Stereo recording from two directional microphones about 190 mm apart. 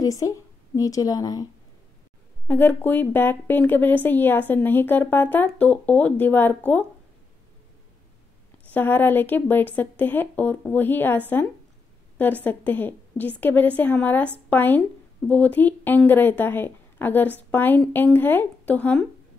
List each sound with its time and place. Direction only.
0.0 s a woman's voice: 20° left (ahead or behind)
8.6 s speech: 10° left (ahead or behind)
12.4 s speech: 10° left (ahead or behind)